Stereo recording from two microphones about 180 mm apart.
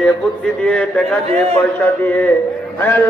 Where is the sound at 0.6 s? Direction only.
5° left (ahead or behind).